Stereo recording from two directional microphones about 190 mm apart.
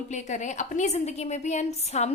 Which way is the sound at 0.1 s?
40° left (ahead or behind).